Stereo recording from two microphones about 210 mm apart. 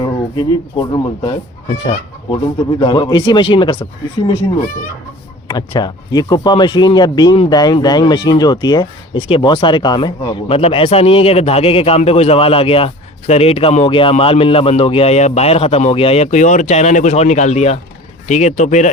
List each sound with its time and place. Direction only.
0.3 s speech: 20° left (ahead or behind)
5.5 s speech: 20° left (ahead or behind); by 18.9 s 35° left (ahead or behind)